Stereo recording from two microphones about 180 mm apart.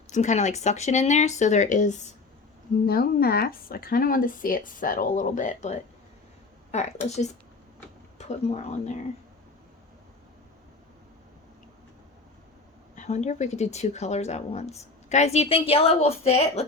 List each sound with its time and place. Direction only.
0.1 s speech: 40° left (ahead or behind)
2.8 s speech: 55° left (ahead or behind); by 9.0 s 40° left (ahead or behind)
13.0 s speech: 40° left (ahead or behind)